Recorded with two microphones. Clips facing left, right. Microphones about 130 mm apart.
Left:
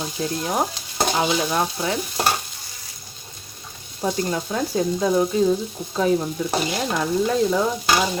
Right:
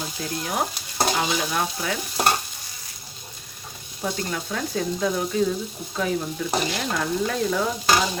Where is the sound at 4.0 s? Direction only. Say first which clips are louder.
Left 5 dB; 25° left (ahead or behind).